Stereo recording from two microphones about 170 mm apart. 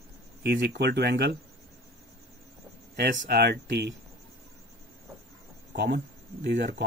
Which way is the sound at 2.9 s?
65° right (ahead or behind).